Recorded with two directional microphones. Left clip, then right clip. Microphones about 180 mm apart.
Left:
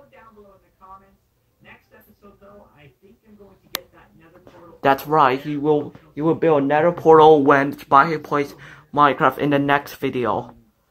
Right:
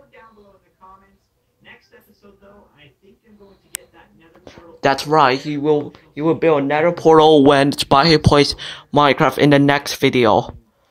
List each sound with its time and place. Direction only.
4.7 s speech: 10° right (ahead or behind)
7.1 s speech: 35° right (ahead or behind); by 8.8 s 55° right (ahead or behind)
8.9 s speech: 35° right (ahead or behind)